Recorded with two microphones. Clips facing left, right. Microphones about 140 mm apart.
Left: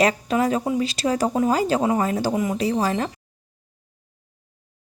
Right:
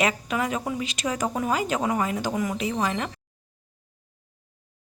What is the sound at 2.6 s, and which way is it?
Speech, 35° left (ahead or behind).